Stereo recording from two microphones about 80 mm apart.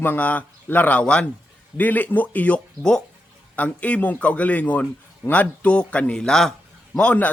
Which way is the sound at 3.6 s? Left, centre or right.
Centre.